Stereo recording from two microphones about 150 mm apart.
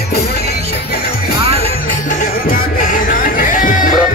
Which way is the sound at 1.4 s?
40° right (ahead or behind).